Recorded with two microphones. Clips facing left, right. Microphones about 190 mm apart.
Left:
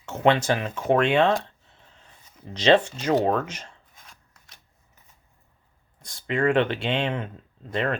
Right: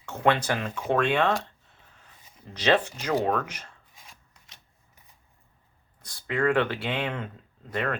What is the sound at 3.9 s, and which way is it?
Scissors, 5° right (ahead or behind).